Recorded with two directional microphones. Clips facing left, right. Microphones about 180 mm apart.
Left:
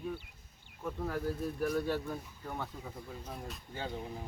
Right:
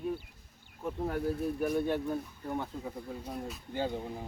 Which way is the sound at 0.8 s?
25° right (ahead or behind).